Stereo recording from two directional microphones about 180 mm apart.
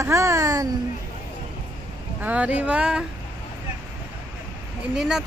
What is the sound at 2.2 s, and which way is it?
Speech, 10° right (ahead or behind).